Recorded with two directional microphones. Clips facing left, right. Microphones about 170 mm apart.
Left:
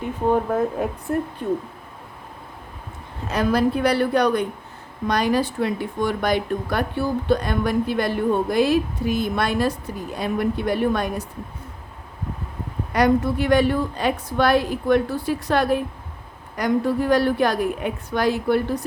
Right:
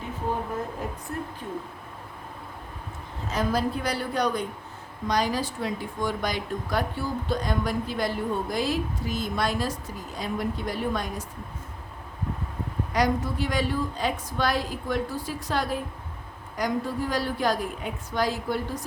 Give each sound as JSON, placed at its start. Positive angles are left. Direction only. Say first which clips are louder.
{"t": 0.3, "sound": "a woman's voice", "louder": "left 10 dB", "side_deg": 65}
{"t": 3.2, "sound": "a woman's voice", "louder": "left 6 dB", "side_deg": 65}
{"t": 12.9, "sound": "speech", "louder": "left 7 dB", "side_deg": 60}